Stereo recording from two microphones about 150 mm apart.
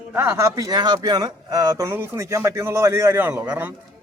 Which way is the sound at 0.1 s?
15° right (ahead or behind).